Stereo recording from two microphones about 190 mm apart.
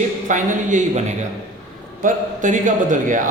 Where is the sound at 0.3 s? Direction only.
40° right (ahead or behind).